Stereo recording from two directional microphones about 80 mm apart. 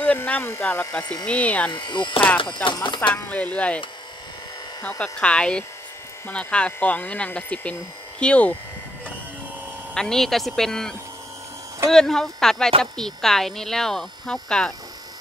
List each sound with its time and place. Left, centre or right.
0.0 s speech: left
1.7 s speech: left
3.3 s speech: centre
4.8 s speech: centre
9.9 s speech: centre